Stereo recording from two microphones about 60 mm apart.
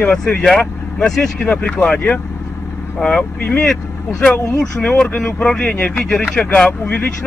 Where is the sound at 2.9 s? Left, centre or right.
Centre.